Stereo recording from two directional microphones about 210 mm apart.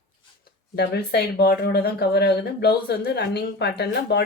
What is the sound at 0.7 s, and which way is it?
Speech, 50° left (ahead or behind).